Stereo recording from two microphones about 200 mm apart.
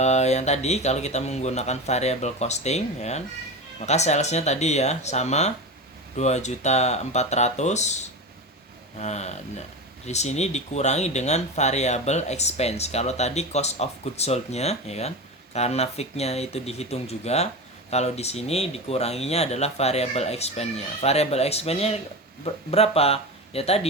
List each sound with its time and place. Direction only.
0.0 s speech: 35° left (ahead or behind)